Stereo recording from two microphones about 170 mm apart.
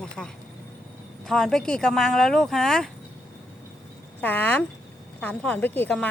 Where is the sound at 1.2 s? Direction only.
5° left (ahead or behind).